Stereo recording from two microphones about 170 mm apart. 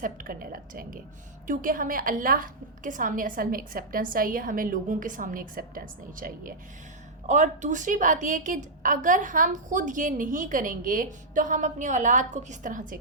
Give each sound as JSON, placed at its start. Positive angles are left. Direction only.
{"t": 0.0, "sound": "a woman's voice", "side_deg": -55}